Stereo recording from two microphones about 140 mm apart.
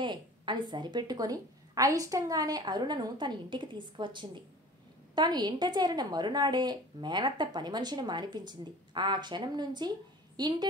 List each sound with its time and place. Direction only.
0.0 s a woman's voice: 35° right (ahead or behind)